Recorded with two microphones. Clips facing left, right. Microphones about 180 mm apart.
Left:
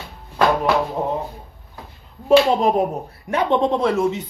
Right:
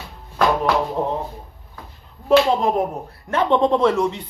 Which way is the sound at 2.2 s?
15° left (ahead or behind).